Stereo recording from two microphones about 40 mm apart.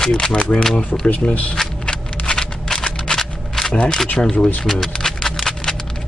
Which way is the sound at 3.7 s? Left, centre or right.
Left.